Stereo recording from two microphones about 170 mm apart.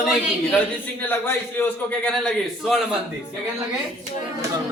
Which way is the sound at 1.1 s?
10° left (ahead or behind).